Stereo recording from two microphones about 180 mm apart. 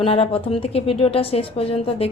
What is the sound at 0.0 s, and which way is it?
A woman's voice, 30° left (ahead or behind).